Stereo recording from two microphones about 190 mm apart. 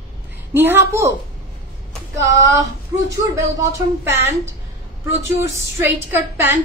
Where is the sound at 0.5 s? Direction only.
10° right (ahead or behind).